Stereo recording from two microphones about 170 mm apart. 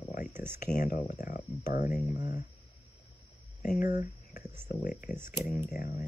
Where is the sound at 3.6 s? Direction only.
45° left (ahead or behind).